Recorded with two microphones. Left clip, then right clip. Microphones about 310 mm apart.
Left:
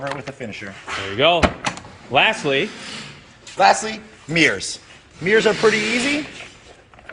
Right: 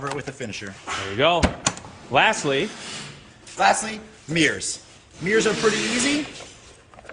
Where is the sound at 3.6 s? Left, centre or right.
Centre.